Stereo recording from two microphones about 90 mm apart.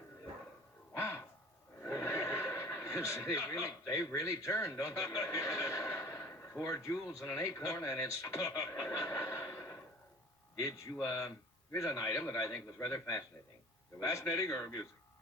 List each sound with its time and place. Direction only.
0.9 s a sound: 30° left (ahead or behind)
1.8 s speech: 25° left (ahead or behind)
11.0 s a man's voice: 35° left (ahead or behind)